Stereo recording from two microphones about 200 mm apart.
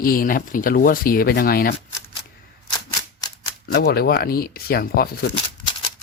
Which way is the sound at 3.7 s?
50° left (ahead or behind).